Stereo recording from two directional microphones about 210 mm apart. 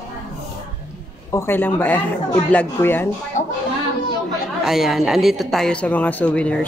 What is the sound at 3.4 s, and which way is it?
Speech, 35° left (ahead or behind).